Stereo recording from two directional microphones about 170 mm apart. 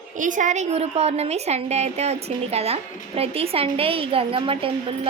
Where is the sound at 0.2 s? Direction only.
50° right (ahead or behind).